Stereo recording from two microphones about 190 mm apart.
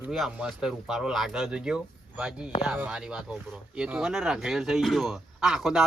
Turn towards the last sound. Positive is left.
turn(degrees=0)  # may be behind; listen again after turning